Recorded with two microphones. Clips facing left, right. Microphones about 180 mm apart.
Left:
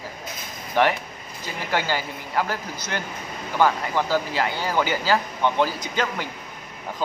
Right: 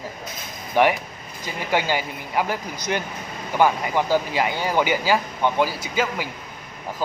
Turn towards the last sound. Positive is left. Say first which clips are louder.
# right 2 dB
turn(degrees=-10)  # may be behind; listen again after turning